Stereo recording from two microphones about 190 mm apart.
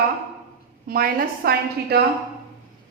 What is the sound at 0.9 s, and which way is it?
A woman's voice, 50° right (ahead or behind).